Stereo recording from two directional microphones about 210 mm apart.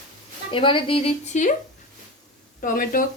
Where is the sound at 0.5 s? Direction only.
25° left (ahead or behind).